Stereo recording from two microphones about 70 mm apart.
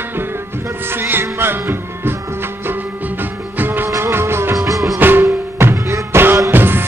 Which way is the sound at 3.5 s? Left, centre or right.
Right.